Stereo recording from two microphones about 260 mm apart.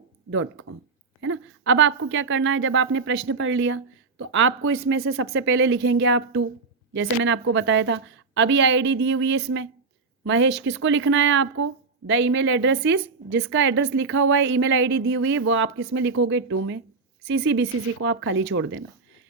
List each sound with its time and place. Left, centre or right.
0.3 s speech: right